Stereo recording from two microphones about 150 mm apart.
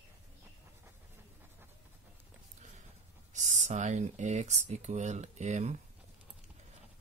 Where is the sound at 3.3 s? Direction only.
55° right (ahead or behind).